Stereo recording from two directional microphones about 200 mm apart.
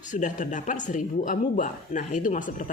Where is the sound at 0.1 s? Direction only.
40° left (ahead or behind).